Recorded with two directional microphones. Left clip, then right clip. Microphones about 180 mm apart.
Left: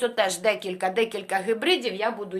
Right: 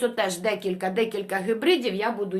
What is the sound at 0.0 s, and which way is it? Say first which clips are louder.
Speech: left 2 dB; 25° left (ahead or behind).